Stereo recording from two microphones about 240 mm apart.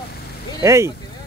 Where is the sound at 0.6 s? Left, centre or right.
Centre.